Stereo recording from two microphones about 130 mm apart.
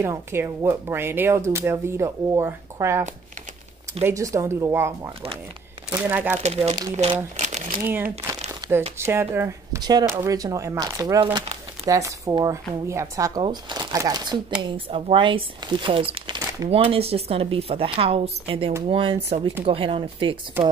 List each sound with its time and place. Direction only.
0.0 s speech: 20° right (ahead or behind)
4.0 s speech: 25° right (ahead or behind)
6.4 s a woman's voice: 55° right (ahead or behind)
7.3 s crumpling: 65° right (ahead or behind)
8.9 s speech: 20° right (ahead or behind)
13.4 s speech: 35° right (ahead or behind)
14.6 s a woman's voice: 45° right (ahead or behind)
20.6 s speech: 15° right (ahead or behind)